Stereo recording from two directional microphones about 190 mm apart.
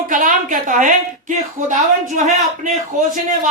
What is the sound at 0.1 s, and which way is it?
A woman's voice, 45° right (ahead or behind).